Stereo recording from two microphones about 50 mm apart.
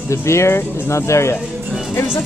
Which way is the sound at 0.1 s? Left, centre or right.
Left.